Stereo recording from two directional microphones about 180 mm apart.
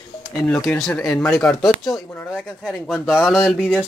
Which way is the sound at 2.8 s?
5° right (ahead or behind).